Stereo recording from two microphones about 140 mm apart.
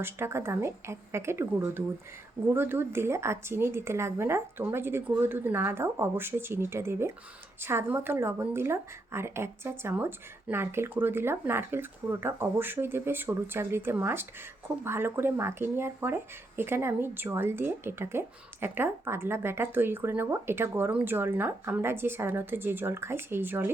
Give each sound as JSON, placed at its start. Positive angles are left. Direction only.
{"t": 0.0, "sound": "speech", "side_deg": -15}